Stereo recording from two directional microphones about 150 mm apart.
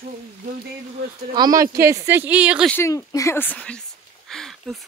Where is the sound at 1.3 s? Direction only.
25° right (ahead or behind); by 2.7 s 10° right (ahead or behind).